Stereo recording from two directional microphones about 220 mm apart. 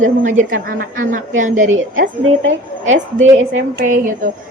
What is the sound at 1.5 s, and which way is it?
Speech, 65° right (ahead or behind).